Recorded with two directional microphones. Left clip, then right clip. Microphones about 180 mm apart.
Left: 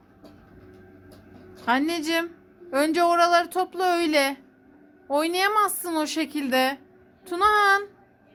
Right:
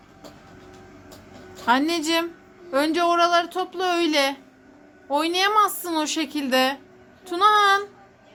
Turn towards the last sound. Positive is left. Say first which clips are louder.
# right 2 dB
turn(degrees=20)  # may be behind; listen again after turning